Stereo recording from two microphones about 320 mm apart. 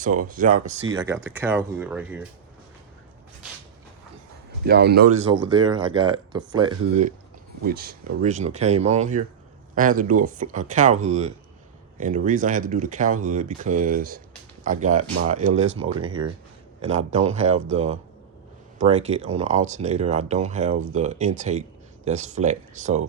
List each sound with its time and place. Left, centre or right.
0.3 s speech: right
0.9 s speech: centre
4.6 s speech: right
5.3 s speech: centre
7.6 s speech: right